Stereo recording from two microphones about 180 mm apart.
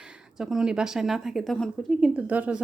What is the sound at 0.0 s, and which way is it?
A woman's voice, 5° right (ahead or behind).